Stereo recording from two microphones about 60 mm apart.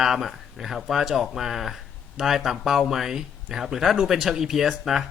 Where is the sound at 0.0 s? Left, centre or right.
Centre.